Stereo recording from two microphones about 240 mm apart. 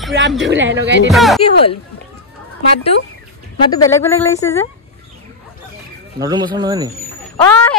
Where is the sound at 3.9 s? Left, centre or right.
Centre.